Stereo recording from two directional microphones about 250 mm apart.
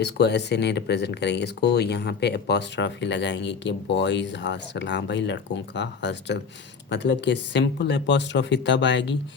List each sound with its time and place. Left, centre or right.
0.0 s speech: left